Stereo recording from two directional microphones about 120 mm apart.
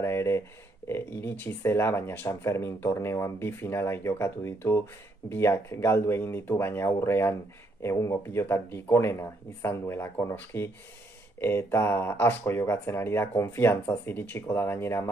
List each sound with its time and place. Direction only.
0.0 s speech: 20° left (ahead or behind)